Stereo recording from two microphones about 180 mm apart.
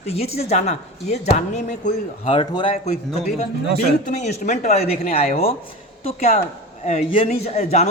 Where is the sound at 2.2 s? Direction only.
30° left (ahead or behind).